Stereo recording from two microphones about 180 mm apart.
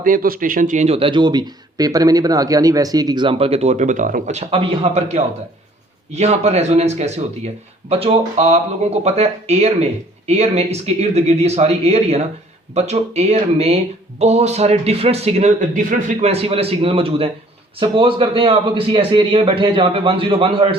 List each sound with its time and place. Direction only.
0.0 s a man's voice: 50° right (ahead or behind); by 20.7 s 30° right (ahead or behind)